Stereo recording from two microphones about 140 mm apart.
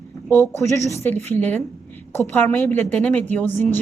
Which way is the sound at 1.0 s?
15° left (ahead or behind).